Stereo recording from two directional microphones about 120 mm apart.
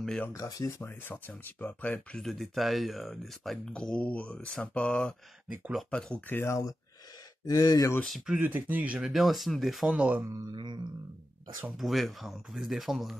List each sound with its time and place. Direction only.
0.0 s speech: 5° left (ahead or behind)
0.3 s speech: 30° left (ahead or behind); by 2.2 s 15° left (ahead or behind)
2.2 s speech: centre (ahead or behind)
6.2 s speech: 20° left (ahead or behind)
7.4 s speech: 35° left (ahead or behind)
8.0 s speech: centre (ahead or behind)
8.4 s speech: 15° right (ahead or behind)
10.5 s a sound: 40° right (ahead or behind)
11.7 s speech: centre (ahead or behind)